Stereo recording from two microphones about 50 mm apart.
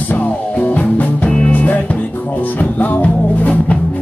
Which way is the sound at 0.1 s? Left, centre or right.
Left.